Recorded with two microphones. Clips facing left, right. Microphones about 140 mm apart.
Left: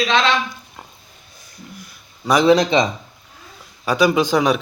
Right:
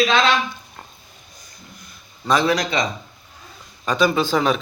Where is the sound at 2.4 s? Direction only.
25° left (ahead or behind).